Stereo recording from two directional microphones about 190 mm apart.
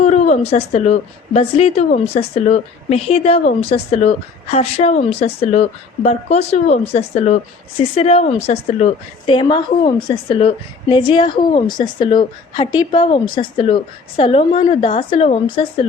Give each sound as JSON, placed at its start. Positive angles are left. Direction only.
{"t": 0.0, "sound": "a woman's voice", "side_deg": 40}